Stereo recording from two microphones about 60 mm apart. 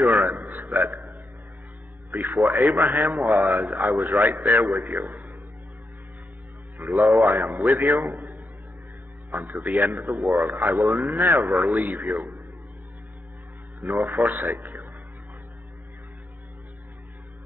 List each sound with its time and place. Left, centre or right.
0.0 s a sound: centre
0.4 s a sound: right
2.0 s a man's voice: centre
7.0 s a man's voice: centre
9.3 s a man's voice: right; by 11.1 s centre
11.1 s a man's voice: centre
11.5 s a man's voice: centre
11.8 s a man's voice: right
13.7 s a man's voice: centre